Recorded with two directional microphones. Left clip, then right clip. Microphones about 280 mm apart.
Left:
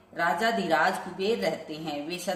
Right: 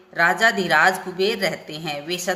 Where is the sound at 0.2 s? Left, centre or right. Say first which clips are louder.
Right 8 dB; right.